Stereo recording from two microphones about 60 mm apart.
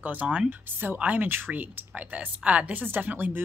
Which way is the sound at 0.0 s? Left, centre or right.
Right.